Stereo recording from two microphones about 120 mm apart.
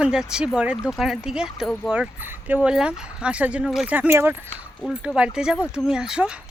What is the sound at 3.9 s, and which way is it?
Speech, 15° right (ahead or behind).